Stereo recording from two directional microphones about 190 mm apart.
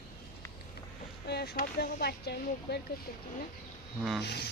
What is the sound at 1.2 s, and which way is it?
Speech, 60° left (ahead or behind).